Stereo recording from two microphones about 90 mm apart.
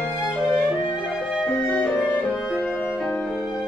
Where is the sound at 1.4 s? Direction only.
15° left (ahead or behind).